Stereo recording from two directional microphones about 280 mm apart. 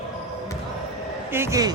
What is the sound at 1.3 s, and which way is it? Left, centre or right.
Speech, centre.